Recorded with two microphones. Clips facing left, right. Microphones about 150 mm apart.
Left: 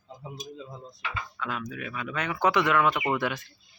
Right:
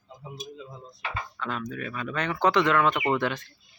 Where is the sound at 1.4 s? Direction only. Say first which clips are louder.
Right 2 dB; 5° left (ahead or behind).